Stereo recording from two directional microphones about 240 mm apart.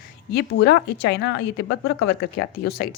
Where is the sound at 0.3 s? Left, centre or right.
Left.